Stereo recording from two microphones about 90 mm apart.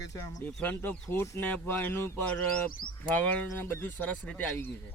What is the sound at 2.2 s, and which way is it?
Speech, 15° left (ahead or behind).